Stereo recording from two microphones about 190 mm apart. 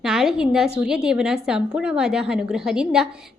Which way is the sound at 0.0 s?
Centre (ahead or behind).